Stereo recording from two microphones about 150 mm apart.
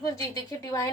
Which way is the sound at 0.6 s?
25° left (ahead or behind).